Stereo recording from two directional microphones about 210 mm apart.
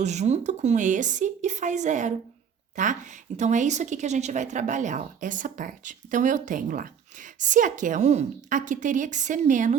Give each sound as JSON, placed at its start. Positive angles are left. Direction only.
{"t": 0.0, "sound": "a woman's voice", "side_deg": -35}